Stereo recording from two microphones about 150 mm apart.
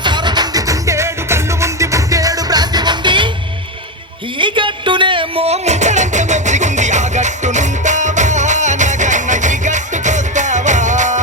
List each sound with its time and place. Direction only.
0.0 s music: 30° right (ahead or behind)
4.4 s music: 35° right (ahead or behind); by 11.2 s 55° right (ahead or behind)